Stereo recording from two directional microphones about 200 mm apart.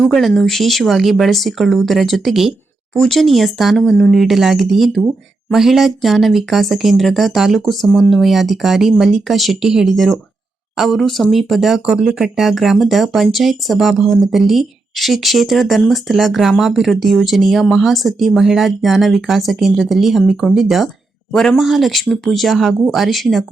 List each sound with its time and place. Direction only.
0.0 s speech: centre (ahead or behind)